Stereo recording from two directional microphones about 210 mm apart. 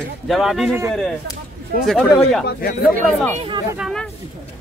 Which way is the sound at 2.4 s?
45° left (ahead or behind).